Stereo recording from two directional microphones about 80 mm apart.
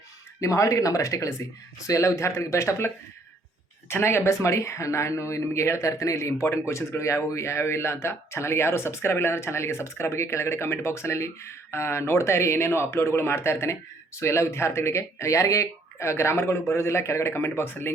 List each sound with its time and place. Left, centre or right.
0.3 s speech: left